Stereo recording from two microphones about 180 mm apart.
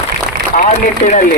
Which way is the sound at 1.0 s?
45° left (ahead or behind).